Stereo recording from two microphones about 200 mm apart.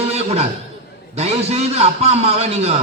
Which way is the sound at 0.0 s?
30° right (ahead or behind).